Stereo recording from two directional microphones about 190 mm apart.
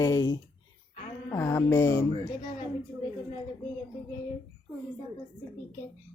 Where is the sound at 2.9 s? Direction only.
15° right (ahead or behind).